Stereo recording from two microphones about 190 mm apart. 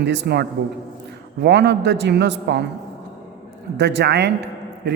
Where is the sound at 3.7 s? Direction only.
65° right (ahead or behind).